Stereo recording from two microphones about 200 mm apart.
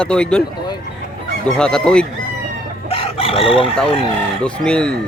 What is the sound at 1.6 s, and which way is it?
Speech, 5° left (ahead or behind).